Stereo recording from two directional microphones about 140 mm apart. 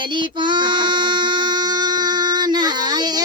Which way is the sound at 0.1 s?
35° right (ahead or behind).